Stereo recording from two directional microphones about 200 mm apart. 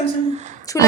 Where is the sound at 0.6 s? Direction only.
15° left (ahead or behind).